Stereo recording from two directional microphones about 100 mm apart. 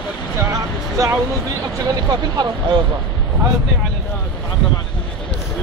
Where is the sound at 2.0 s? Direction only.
45° right (ahead or behind).